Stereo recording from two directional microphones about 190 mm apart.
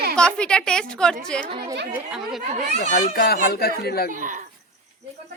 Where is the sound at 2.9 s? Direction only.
50° left (ahead or behind).